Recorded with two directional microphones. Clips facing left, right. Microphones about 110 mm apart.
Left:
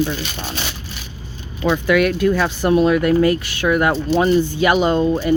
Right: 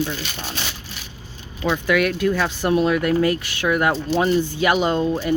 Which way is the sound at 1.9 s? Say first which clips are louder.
Left 3 dB; 30° left (ahead or behind).